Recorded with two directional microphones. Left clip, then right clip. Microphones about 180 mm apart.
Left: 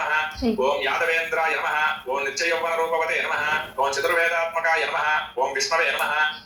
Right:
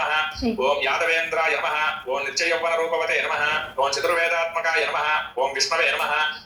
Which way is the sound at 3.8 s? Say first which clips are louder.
Even; 30° right (ahead or behind).